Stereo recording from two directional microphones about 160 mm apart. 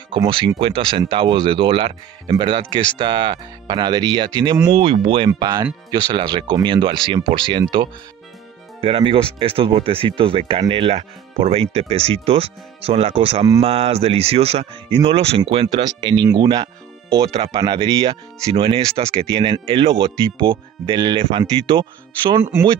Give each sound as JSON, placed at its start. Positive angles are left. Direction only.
{"t": 0.1, "sound": "speech", "side_deg": -30}
{"t": 22.3, "sound": "speech", "side_deg": -15}